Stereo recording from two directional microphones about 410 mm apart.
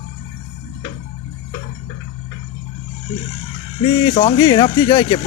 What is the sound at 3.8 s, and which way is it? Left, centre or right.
Speech, centre.